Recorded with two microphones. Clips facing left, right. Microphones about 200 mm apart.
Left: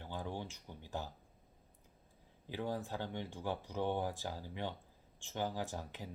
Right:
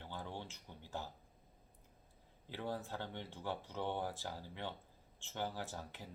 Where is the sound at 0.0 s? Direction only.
15° left (ahead or behind).